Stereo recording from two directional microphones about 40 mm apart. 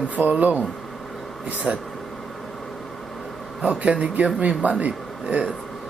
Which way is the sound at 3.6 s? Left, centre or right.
Right.